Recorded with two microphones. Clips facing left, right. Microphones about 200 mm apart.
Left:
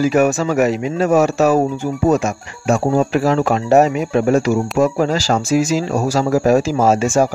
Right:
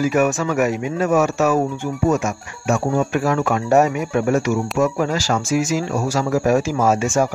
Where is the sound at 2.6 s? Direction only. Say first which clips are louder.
Left 4 dB; 35° left (ahead or behind).